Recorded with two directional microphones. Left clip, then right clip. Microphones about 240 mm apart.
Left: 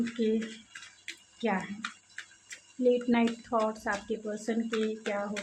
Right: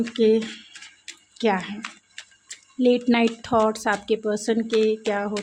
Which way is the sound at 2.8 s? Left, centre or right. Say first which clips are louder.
Right 7 dB; right.